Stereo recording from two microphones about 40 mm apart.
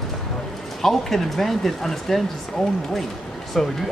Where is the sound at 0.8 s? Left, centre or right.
Centre.